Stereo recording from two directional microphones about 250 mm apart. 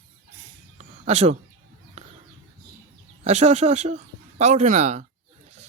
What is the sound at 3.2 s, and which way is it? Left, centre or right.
Speech, right.